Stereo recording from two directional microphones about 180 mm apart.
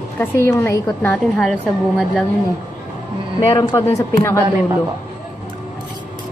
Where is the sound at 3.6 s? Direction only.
20° left (ahead or behind).